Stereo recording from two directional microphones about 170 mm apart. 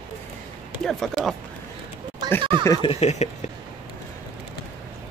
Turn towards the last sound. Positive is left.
turn(degrees=40)  # may be behind; listen again after turning